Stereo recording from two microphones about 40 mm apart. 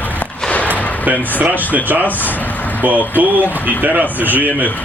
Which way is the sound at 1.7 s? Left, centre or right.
Right.